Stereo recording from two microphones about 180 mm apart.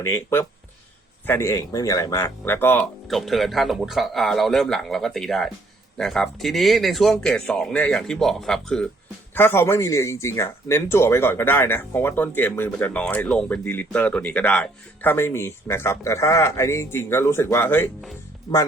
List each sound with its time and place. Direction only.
0.0 s speech: 15° left (ahead or behind)
3.1 s speech: centre (ahead or behind)